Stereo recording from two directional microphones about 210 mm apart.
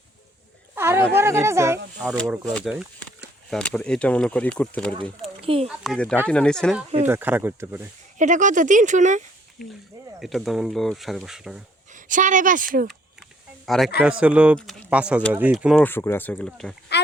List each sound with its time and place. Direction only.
0.8 s speech: 10° right (ahead or behind)
2.0 s speech: centre (ahead or behind)
5.4 s a sound: 25° right (ahead or behind)
5.6 s speech: centre (ahead or behind)
7.1 s speech: 10° right (ahead or behind)
8.2 s speech: 35° right (ahead or behind)
10.2 s speech: centre (ahead or behind)
11.9 s speech: 40° right (ahead or behind)
13.7 s a man's voice: centre (ahead or behind)